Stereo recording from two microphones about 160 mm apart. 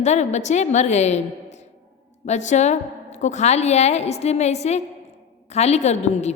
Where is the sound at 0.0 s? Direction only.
45° left (ahead or behind).